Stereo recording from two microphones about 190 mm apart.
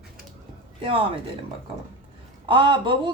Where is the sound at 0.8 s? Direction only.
30° right (ahead or behind).